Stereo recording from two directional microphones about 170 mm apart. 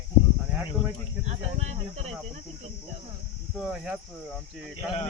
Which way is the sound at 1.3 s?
40° right (ahead or behind).